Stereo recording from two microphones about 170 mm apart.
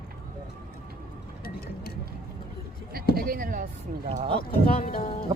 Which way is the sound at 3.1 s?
60° right (ahead or behind).